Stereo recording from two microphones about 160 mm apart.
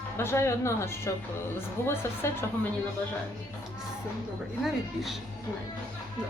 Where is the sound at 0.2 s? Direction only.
15° left (ahead or behind).